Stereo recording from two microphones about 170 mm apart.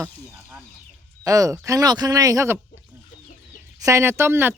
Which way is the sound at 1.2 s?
20° right (ahead or behind).